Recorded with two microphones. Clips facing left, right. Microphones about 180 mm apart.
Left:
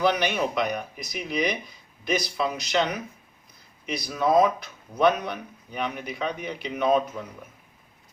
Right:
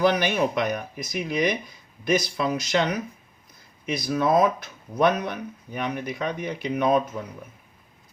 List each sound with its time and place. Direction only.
0.0 s speech: 45° right (ahead or behind)